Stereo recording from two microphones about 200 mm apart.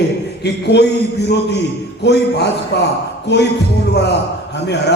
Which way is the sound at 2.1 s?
55° left (ahead or behind).